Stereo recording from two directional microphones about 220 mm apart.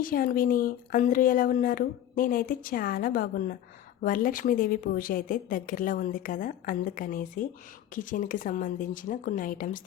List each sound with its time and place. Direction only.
0.0 s speech: 40° left (ahead or behind)